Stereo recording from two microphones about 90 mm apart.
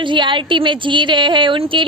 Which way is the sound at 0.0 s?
65° right (ahead or behind).